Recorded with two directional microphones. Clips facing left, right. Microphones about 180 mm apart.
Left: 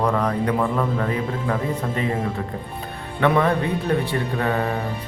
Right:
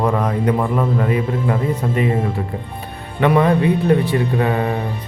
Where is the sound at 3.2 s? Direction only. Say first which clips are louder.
Right 4 dB; 15° right (ahead or behind).